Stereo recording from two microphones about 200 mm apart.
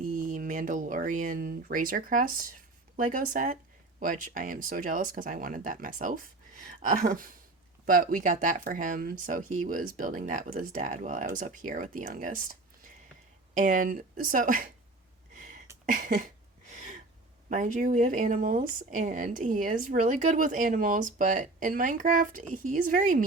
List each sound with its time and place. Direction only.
0.0 s speech: 45° right (ahead or behind)
15.4 s a sound: 40° right (ahead or behind)
15.9 s speech: 40° right (ahead or behind)
16.6 s gasp: 40° right (ahead or behind)
17.5 s speech: 40° right (ahead or behind)